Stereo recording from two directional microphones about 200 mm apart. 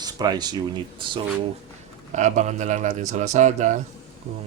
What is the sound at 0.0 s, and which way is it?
Speech, 20° right (ahead or behind).